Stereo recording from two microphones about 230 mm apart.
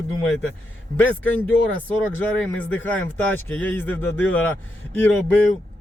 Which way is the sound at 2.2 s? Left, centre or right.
Centre.